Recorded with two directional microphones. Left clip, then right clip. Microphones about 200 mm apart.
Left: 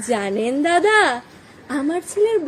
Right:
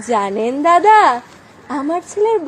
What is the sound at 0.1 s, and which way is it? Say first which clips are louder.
A woman's voice: right 4 dB; 30° left (ahead or behind).